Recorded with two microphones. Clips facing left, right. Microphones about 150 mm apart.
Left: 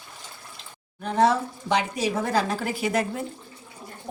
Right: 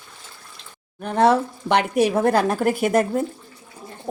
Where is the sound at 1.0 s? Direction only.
60° right (ahead or behind).